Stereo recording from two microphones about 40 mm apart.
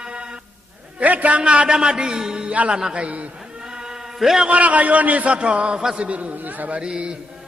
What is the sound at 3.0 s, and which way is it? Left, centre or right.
Speech, right.